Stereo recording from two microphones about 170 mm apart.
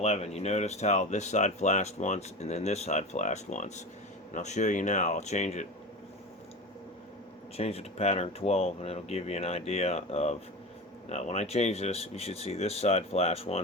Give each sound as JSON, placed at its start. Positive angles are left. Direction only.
{"t": 0.0, "sound": "speech", "side_deg": 40}
{"t": 7.5, "sound": "speech", "side_deg": 35}